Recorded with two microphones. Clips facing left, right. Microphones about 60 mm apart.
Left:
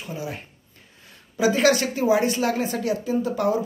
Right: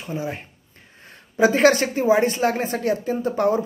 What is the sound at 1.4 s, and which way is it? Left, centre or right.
A woman's voice, right.